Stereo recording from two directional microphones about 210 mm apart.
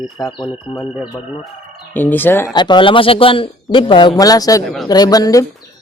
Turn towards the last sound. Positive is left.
turn(degrees=15)  # may be behind; listen again after turning